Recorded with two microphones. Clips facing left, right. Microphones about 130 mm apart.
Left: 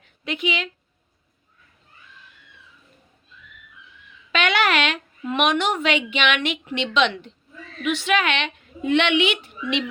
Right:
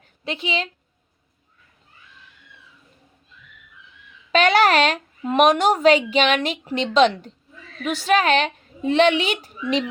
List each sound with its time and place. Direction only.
0.3 s speech: 30° right (ahead or behind)
4.3 s speech: 40° right (ahead or behind)